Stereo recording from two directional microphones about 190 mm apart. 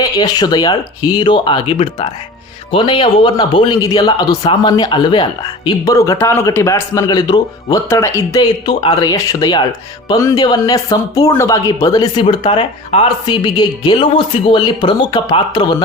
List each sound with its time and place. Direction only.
0.0 s a man's voice: 20° left (ahead or behind)